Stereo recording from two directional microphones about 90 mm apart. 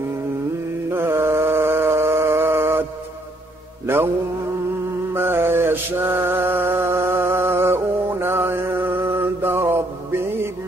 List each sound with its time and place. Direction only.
0.8 s mantra: 25° right (ahead or behind)
3.8 s mantra: 25° right (ahead or behind)
5.1 s mantra: 25° right (ahead or behind)